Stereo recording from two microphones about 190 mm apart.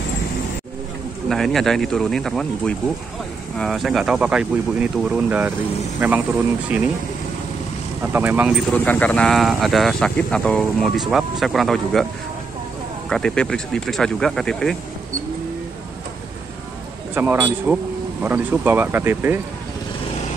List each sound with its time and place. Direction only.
1.3 s speech: centre (ahead or behind)
8.0 s speech: 10° right (ahead or behind)
8.7 s speech: 10° left (ahead or behind)
13.1 s speech: 5° left (ahead or behind)
17.1 s speech: 10° right (ahead or behind)